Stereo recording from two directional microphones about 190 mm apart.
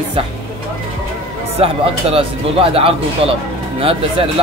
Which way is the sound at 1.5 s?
30° right (ahead or behind).